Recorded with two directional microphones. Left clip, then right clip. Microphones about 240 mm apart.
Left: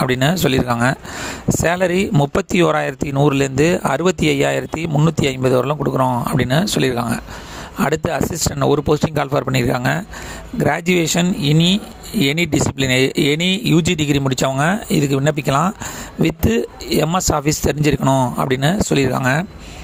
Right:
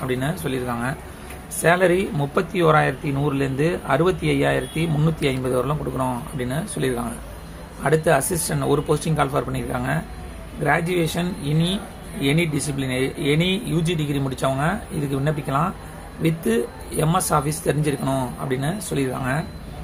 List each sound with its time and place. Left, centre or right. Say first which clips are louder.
0.0 s speech: left 9 dB; left